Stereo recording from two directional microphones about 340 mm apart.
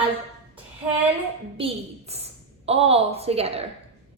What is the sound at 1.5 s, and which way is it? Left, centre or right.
A woman's voice, centre.